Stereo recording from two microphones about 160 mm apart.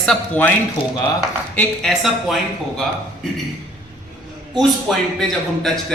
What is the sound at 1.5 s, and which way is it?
Speech, centre (ahead or behind).